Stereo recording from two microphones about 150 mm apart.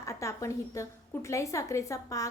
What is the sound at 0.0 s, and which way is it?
A woman's voice, 20° left (ahead or behind).